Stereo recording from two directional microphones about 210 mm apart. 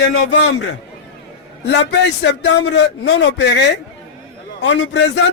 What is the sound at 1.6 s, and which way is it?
A man's voice, 55° left (ahead or behind).